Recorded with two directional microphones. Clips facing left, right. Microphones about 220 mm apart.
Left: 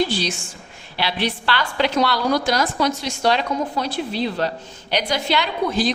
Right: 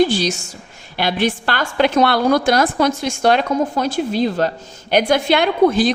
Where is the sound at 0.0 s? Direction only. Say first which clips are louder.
Right 6 dB; 45° right (ahead or behind).